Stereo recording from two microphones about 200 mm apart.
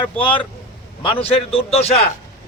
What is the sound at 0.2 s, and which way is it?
A man's voice, 25° left (ahead or behind).